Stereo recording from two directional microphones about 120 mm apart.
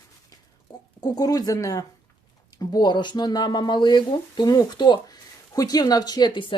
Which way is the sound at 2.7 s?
40° left (ahead or behind).